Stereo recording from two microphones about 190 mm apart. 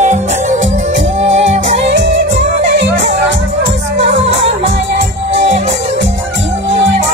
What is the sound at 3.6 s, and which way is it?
Music, 70° right (ahead or behind).